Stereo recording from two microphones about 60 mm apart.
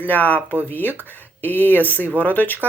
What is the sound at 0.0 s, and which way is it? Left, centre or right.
Speech, left.